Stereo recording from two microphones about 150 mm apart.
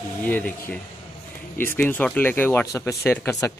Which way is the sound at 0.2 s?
10° left (ahead or behind).